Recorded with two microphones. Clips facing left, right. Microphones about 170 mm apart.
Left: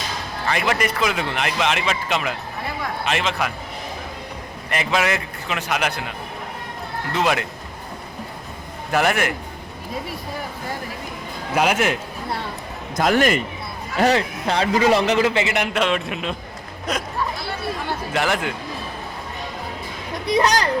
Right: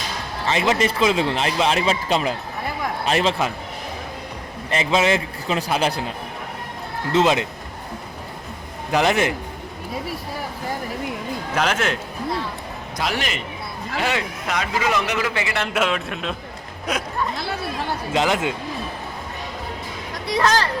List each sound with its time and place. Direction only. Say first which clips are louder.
0.4 s a man's voice: right 2 dB; 25° right (ahead or behind)
4.7 s a man's voice: right 3 dB; 25° right (ahead or behind)
7.1 s a man's voice: right 4 dB; 25° right (ahead or behind)
8.9 s a man's voice: right 1 dB; 20° right (ahead or behind)
11.5 s speech: left 3 dB; 10° left (ahead or behind)
13.0 s a man's voice: left 8 dB; 50° left (ahead or behind); by 15.6 s 25° left (ahead or behind)
15.7 s a man's voice: left 1 dB; centre (ahead or behind)
18.1 s a man's voice: right 2 dB; 20° right (ahead or behind)
20.2 s a man's voice: left 1 dB; 20° left (ahead or behind)